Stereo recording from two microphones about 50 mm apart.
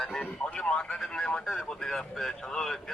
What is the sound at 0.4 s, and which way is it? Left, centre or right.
A man's voice, left.